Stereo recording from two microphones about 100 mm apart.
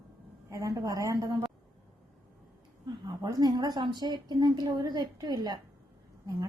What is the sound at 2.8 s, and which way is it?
A woman's voice, 40° right (ahead or behind).